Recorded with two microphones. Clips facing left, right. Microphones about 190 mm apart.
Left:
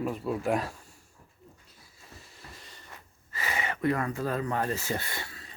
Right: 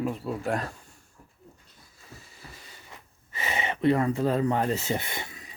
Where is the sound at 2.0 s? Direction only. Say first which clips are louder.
Right 2 dB; centre (ahead or behind).